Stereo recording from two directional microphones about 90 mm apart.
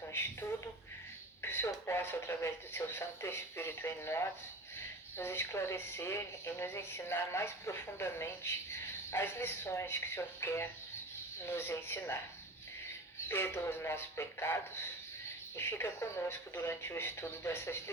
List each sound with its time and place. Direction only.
1.4 s a sound: 25° left (ahead or behind)
1.9 s speech: 30° left (ahead or behind)
13.2 s speech: 25° left (ahead or behind)